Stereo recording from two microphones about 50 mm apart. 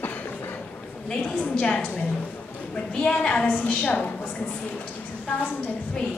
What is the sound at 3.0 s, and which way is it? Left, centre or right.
Speech, centre.